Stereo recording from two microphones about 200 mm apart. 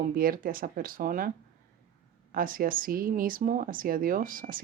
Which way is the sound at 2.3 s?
45° right (ahead or behind).